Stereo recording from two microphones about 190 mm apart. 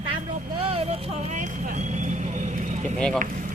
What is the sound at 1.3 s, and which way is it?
Vehicle, 40° right (ahead or behind).